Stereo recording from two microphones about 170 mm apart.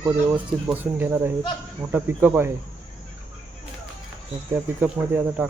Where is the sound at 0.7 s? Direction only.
10° right (ahead or behind).